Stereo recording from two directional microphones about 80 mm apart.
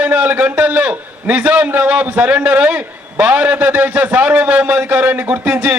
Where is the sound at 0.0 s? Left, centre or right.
Centre.